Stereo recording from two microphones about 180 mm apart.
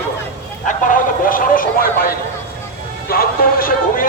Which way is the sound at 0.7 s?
50° left (ahead or behind).